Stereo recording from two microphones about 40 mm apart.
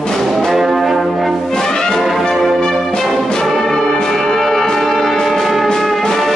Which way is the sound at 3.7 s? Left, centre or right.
Centre.